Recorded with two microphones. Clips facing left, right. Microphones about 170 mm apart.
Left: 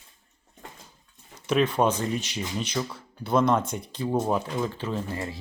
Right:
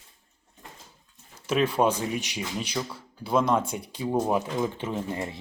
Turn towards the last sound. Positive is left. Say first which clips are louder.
# even
turn(degrees=-20)  # may be behind; listen again after turning